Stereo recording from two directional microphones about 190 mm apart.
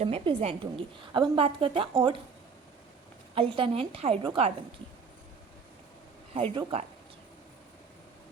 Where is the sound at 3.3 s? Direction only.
30° right (ahead or behind).